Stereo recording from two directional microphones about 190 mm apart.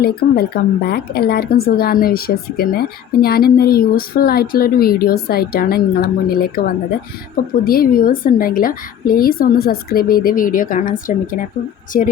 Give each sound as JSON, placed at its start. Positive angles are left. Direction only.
{"t": 0.0, "sound": "speech", "side_deg": 55}